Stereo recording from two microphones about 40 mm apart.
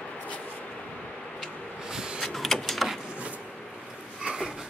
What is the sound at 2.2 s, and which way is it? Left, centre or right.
Vehicle, centre.